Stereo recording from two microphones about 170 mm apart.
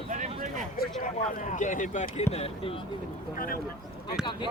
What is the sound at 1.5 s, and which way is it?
Speech, 50° left (ahead or behind).